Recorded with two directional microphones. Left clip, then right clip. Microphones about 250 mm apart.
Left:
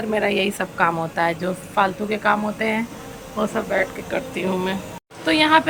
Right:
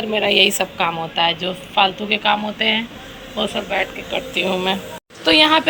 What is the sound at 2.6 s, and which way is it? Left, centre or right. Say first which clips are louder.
A woman's voice: right 4 dB; centre.